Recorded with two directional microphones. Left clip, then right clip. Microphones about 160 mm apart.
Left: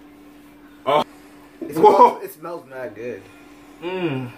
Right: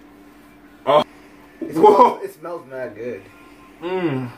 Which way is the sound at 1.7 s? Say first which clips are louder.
Right 1 dB; centre (ahead or behind).